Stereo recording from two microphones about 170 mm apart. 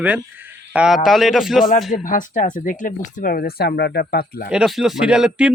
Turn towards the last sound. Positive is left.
turn(degrees=-5)  # may be behind; listen again after turning